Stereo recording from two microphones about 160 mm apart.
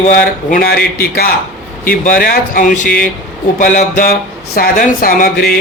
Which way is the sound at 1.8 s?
60° left (ahead or behind).